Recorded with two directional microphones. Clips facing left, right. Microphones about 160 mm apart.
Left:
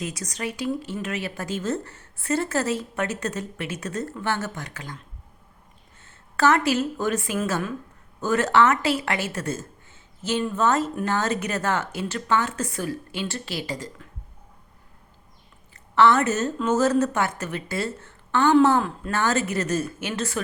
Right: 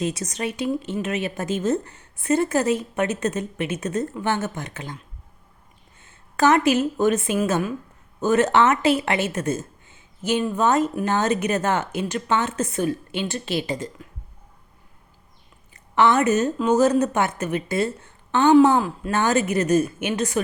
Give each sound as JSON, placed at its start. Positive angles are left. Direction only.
{"t": 0.0, "sound": "a woman's voice", "side_deg": -25}
{"t": 6.0, "sound": "a woman's voice", "side_deg": -15}
{"t": 15.7, "sound": "a woman's voice", "side_deg": -15}
{"t": 18.8, "sound": "speech", "side_deg": -5}
{"t": 19.1, "sound": "a woman's voice", "side_deg": -20}